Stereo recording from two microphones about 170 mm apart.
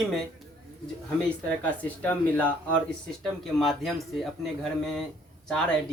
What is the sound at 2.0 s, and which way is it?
A woman's voice, 10° left (ahead or behind).